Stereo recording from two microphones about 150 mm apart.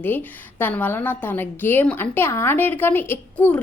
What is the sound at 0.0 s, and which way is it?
A woman's voice, 10° left (ahead or behind).